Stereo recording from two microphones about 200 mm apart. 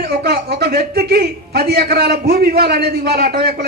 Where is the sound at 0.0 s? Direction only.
50° right (ahead or behind).